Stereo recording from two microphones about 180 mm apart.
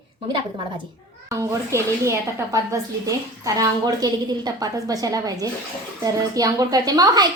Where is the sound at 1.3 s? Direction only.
15° right (ahead or behind).